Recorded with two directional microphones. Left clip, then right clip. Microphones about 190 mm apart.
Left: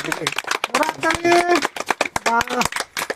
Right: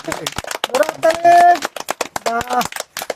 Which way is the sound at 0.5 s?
35° right (ahead or behind).